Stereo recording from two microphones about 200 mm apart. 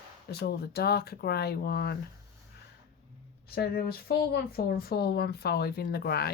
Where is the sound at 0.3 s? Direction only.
50° left (ahead or behind).